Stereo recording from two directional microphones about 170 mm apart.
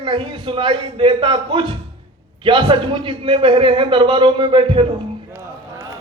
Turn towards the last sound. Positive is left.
turn(degrees=-15)  # may be behind; listen again after turning